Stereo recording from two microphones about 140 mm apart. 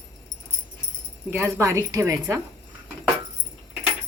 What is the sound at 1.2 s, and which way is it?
A woman's voice, 15° right (ahead or behind).